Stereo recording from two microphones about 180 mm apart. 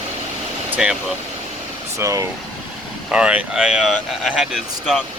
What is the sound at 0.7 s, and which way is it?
Speech, 5° right (ahead or behind).